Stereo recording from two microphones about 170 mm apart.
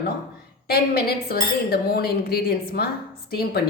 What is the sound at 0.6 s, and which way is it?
A woman's voice, 70° left (ahead or behind).